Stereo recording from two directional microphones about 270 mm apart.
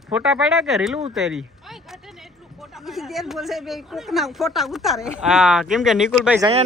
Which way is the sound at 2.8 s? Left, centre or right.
Centre.